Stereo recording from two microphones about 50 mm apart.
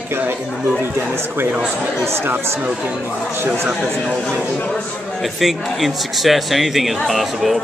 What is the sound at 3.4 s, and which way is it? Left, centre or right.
Speech, right.